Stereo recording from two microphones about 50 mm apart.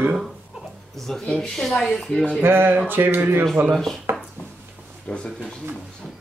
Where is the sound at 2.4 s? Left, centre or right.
Right.